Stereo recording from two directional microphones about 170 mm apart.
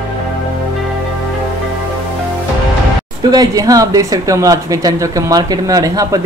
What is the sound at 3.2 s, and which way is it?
Speech, 20° right (ahead or behind).